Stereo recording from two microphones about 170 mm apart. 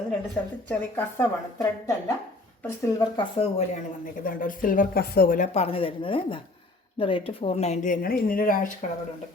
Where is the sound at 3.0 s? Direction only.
30° left (ahead or behind); by 5.5 s 55° left (ahead or behind).